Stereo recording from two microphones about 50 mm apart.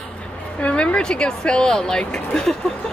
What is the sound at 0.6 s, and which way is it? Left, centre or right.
Speech, left.